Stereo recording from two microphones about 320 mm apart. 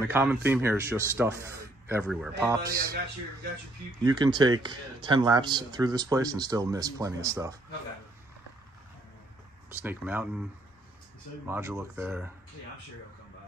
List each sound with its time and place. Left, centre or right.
0.0 s a man's voice: centre
4.0 s a man's voice: centre
9.8 s speech: centre
11.4 s speech: centre